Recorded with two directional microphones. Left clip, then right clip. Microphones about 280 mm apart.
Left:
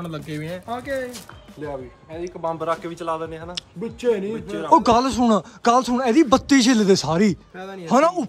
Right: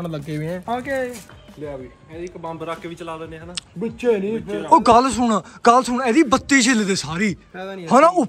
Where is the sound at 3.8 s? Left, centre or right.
Centre.